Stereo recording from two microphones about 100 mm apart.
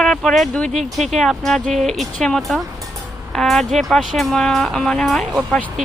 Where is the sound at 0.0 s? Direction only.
5° left (ahead or behind).